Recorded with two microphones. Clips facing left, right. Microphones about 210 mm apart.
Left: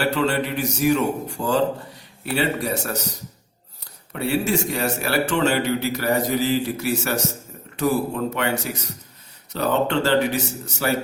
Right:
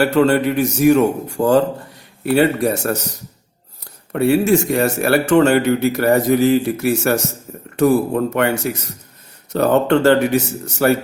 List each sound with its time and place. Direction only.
0.1 s speech: 50° right (ahead or behind)
4.1 s speech: 50° right (ahead or behind)